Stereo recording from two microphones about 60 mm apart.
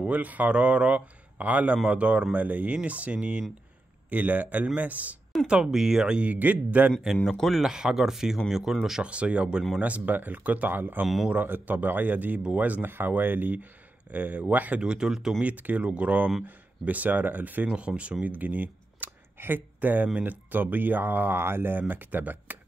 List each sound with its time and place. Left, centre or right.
0.0 s speech: right
5.5 s speech: centre
6.3 s speech: right
7.2 s speech: centre
7.6 s speech: centre
9.0 s speech: centre
14.8 s speech: centre
15.4 s speech: right
17.7 s speech: centre